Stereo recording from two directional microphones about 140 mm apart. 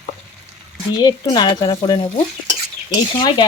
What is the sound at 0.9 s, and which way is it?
Stir, 35° left (ahead or behind).